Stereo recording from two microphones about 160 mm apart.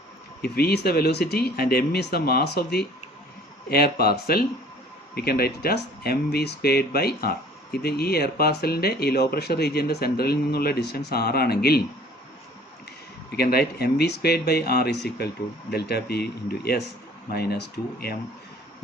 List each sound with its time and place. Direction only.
0.4 s speech: 75° left (ahead or behind)
3.7 s speech: 75° left (ahead or behind)
13.3 s speech: 75° left (ahead or behind)